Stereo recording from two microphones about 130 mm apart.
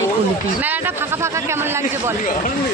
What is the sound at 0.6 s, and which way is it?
A man's voice, 15° right (ahead or behind).